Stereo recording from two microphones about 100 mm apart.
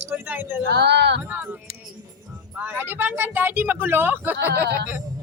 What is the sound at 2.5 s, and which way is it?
Speech, 20° right (ahead or behind).